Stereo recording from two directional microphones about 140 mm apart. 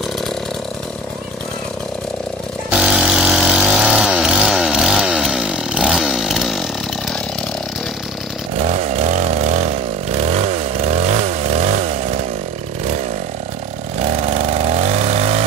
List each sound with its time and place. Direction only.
2.7 s chainsaw: 5° right (ahead or behind)
8.5 s chainsaw: 50° right (ahead or behind)
14.1 s vehicle: 50° right (ahead or behind)